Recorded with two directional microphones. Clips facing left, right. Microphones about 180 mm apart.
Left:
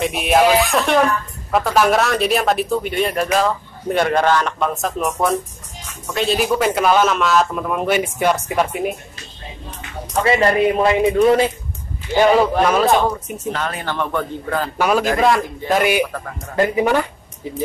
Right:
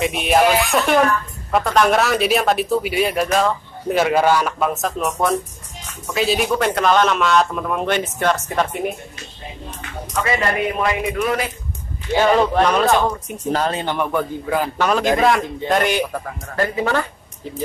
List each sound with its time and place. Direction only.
0.0 s speech: centre (ahead or behind)
10.2 s a man's voice: 30° left (ahead or behind)
12.2 s speech: 5° left (ahead or behind)
13.5 s speech: 30° right (ahead or behind)
13.8 s a man's voice: 10° right (ahead or behind)
14.8 s speech: 5° left (ahead or behind)